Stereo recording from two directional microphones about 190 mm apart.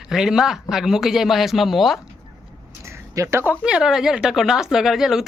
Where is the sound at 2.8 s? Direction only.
15° right (ahead or behind).